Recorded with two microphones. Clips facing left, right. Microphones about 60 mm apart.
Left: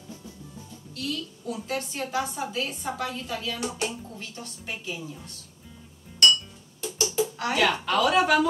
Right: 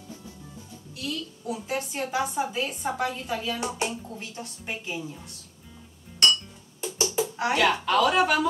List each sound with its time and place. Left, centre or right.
0.9 s a woman's voice: centre
6.8 s music: right
7.5 s speech: centre